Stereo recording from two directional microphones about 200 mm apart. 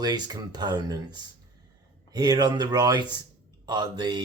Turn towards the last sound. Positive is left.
turn(degrees=-20)  # may be behind; listen again after turning